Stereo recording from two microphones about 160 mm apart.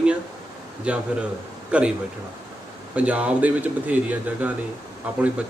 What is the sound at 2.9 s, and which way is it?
Speech, 5° right (ahead or behind).